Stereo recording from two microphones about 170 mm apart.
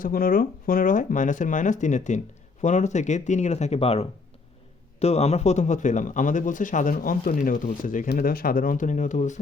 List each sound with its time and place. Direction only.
0.0 s speech: 55° left (ahead or behind)
8.1 s speech: 60° left (ahead or behind)